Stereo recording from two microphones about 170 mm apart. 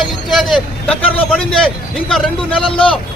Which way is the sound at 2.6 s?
30° left (ahead or behind).